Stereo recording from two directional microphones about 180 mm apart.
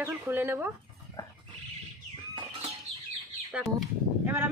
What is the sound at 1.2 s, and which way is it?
Wild animals, 20° left (ahead or behind).